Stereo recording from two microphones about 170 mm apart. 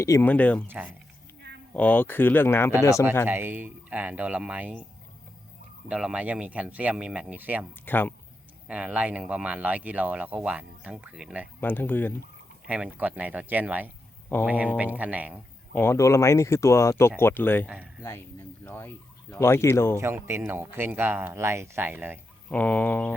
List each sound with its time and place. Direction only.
0.0 s speech: 15° left (ahead or behind)
1.7 s speech: 10° left (ahead or behind)
3.2 s speech: 15° right (ahead or behind)
5.9 s speech: 5° right (ahead or behind)
7.9 s speech: 10° left (ahead or behind)
8.6 s speech: 5° right (ahead or behind)
11.6 s speech: 10° left (ahead or behind)
12.6 s speech: 10° right (ahead or behind)
15.7 s speech: 15° left (ahead or behind)
20.0 s speech: 15° right (ahead or behind)
22.4 s speech: 10° left (ahead or behind)